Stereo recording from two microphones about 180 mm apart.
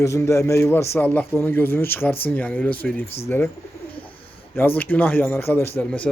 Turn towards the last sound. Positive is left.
turn(degrees=10)  # may be behind; listen again after turning